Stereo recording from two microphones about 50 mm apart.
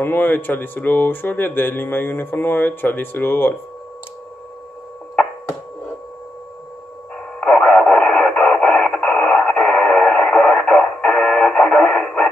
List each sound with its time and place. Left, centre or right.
0.0 s speech: left
7.3 s radio: left